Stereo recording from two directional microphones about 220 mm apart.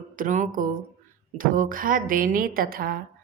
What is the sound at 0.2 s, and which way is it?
A woman's voice, 35° right (ahead or behind).